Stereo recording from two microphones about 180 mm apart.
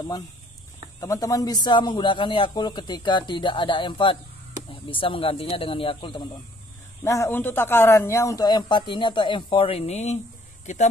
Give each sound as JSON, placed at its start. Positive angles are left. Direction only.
{"t": 1.0, "sound": "a man's voice", "side_deg": 20}
{"t": 7.1, "sound": "a man's voice", "side_deg": 15}